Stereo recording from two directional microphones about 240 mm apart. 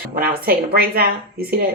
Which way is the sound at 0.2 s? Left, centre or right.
Right.